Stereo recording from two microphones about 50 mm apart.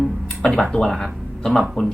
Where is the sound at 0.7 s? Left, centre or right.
Centre.